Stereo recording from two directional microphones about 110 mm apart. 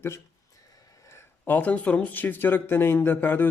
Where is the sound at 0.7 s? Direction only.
35° left (ahead or behind); by 3.5 s 15° left (ahead or behind).